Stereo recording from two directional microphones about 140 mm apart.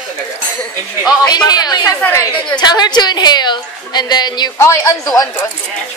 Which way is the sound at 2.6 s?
30° left (ahead or behind).